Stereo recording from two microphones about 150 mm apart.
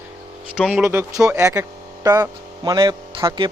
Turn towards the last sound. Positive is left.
turn(degrees=-30)  # may be behind; listen again after turning